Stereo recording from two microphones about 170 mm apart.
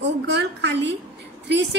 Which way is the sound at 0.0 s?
90° right.